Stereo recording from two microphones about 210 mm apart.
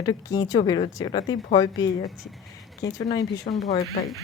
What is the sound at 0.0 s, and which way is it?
Speech, 20° left (ahead or behind).